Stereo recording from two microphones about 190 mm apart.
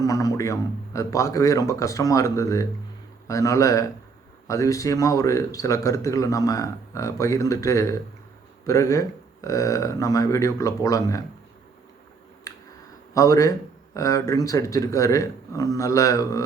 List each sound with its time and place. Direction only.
0.0 s a man's voice: 20° left (ahead or behind)
12.5 s a sound: 15° left (ahead or behind)
13.1 s a man's voice: 15° left (ahead or behind)